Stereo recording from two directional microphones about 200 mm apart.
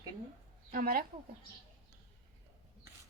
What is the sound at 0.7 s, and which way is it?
Speech, 45° right (ahead or behind).